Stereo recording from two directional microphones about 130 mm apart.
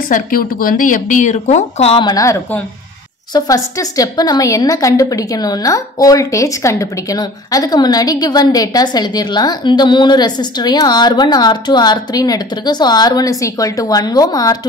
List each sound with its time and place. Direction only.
0.1 s speech: 90° left; by 2.0 s 60° left (ahead or behind)
2.0 s a woman's voice: 30° left (ahead or behind)